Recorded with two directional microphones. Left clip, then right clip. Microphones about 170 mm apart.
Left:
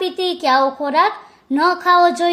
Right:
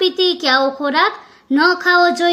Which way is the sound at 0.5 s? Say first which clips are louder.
Even; 15° left (ahead or behind).